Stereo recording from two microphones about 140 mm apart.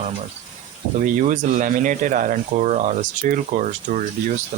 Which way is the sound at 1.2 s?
65° right (ahead or behind).